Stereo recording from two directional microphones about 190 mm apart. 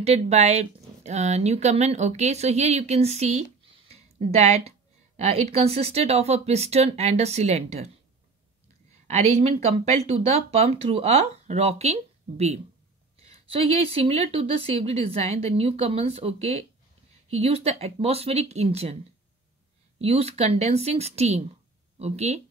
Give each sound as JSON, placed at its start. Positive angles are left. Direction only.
{"t": 0.0, "sound": "a woman's voice", "side_deg": -35}
{"t": 9.0, "sound": "a woman's voice", "side_deg": -35}
{"t": 20.0, "sound": "a woman's voice", "side_deg": -35}